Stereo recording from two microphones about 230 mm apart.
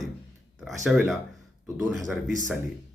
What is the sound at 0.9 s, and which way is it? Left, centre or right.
Speech, centre.